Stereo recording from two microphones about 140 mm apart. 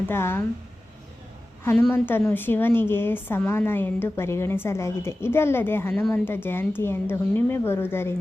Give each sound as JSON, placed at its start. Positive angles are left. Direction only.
{"t": 0.1, "sound": "a woman's voice", "side_deg": 15}
{"t": 1.9, "sound": "a woman's voice", "side_deg": 15}